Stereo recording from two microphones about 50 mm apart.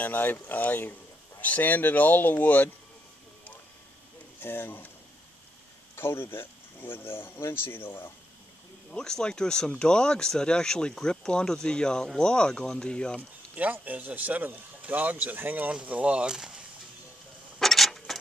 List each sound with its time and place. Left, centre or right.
0.0 s speech: left
4.4 s speech: left
5.9 s speech: left
8.9 s speech: centre
13.6 s speech: right
16.3 s a sound: centre
17.6 s a sound: centre